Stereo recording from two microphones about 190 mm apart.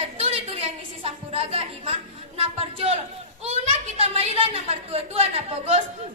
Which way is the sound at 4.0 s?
30° right (ahead or behind).